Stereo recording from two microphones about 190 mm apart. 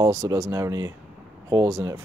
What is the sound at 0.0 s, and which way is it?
Speech, 20° right (ahead or behind).